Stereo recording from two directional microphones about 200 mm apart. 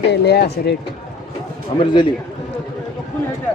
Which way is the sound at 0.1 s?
55° left (ahead or behind).